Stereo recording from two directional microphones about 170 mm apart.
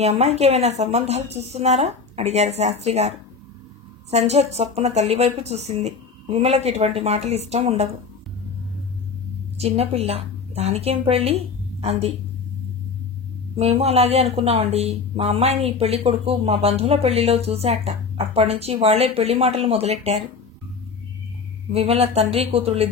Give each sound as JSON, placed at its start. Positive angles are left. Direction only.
{"t": 0.0, "sound": "speech", "side_deg": -40}
{"t": 9.6, "sound": "a woman's voice", "side_deg": -35}
{"t": 13.6, "sound": "speech", "side_deg": -35}
{"t": 21.7, "sound": "speech", "side_deg": -35}